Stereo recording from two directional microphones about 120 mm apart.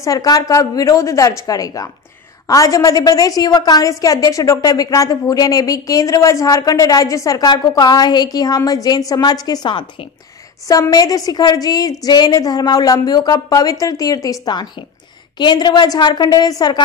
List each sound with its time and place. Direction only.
0.0 s a woman's voice: 30° left (ahead or behind)